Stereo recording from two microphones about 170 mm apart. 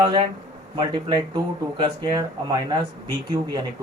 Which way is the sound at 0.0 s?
30° right (ahead or behind).